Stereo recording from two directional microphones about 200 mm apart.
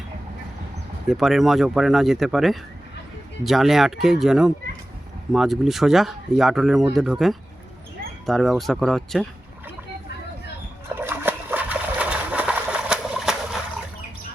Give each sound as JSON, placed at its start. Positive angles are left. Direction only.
{"t": 1.0, "sound": "speech", "side_deg": 0}
{"t": 10.8, "sound": "splash", "side_deg": -10}